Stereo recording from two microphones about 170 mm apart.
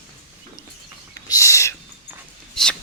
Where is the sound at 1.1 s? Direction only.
20° left (ahead or behind).